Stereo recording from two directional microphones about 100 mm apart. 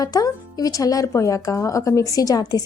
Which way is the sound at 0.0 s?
40° left (ahead or behind).